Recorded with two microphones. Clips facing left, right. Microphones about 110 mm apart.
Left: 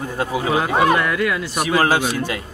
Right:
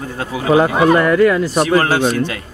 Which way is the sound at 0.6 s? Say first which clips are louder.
Right 5 dB; 40° right (ahead or behind).